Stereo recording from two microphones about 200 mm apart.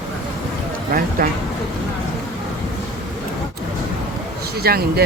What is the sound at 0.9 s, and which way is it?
Speech, 45° right (ahead or behind).